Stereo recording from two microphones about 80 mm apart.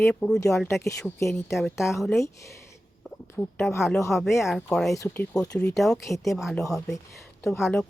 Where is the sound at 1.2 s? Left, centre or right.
Left.